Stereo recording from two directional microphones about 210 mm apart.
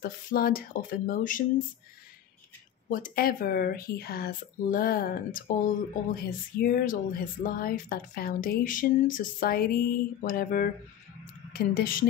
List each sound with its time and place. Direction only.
0.0 s speech: 45° left (ahead or behind)
2.9 s speech: 45° left (ahead or behind)